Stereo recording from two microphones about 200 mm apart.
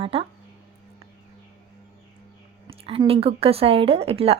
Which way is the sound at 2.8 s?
30° right (ahead or behind).